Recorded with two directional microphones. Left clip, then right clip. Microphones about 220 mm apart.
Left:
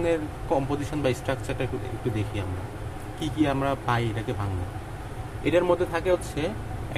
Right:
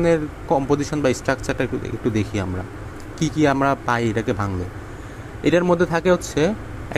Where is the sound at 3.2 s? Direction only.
25° right (ahead or behind).